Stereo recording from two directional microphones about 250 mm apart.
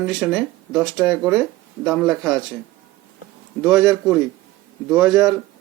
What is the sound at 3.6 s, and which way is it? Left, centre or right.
Speech, centre.